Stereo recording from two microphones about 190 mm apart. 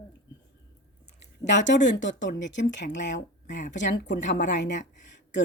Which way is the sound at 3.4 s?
40° left (ahead or behind).